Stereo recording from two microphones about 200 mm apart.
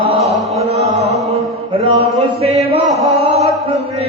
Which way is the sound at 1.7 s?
30° right (ahead or behind).